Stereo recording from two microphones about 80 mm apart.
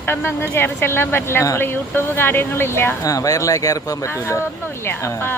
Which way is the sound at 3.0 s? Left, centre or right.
Left.